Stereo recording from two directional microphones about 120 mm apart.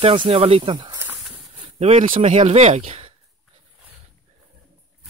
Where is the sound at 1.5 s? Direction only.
55° right (ahead or behind).